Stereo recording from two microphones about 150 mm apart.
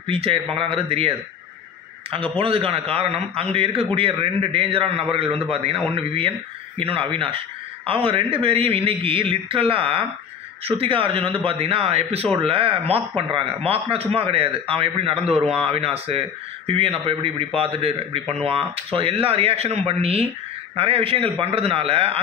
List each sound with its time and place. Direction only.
0.0 s speech: 40° right (ahead or behind)